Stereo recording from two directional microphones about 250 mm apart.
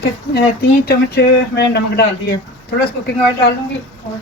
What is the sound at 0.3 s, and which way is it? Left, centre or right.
Speech, left.